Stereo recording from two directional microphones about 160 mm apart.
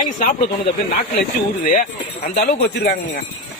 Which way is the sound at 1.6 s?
55° left (ahead or behind).